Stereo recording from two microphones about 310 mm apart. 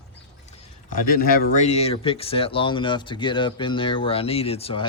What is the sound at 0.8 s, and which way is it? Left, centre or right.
Speech, left.